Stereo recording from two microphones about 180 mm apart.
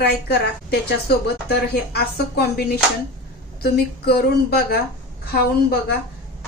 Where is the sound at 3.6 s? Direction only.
60° left (ahead or behind).